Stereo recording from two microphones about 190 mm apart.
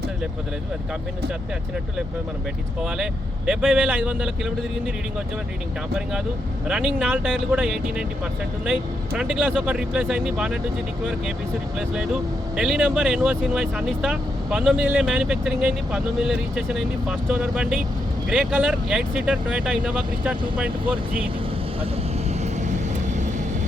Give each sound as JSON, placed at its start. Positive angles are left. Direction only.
{"t": 2.8, "sound": "speech", "side_deg": -5}
{"t": 6.7, "sound": "speech", "side_deg": -5}
{"t": 12.5, "sound": "speech", "side_deg": -5}
{"t": 22.6, "sound": "vehicle", "side_deg": -40}